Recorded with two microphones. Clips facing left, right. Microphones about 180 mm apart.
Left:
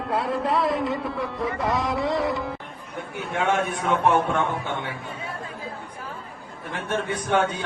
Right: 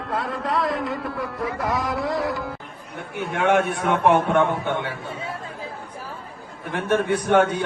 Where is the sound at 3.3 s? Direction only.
65° right (ahead or behind).